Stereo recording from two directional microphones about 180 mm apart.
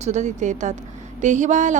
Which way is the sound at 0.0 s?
40° right (ahead or behind).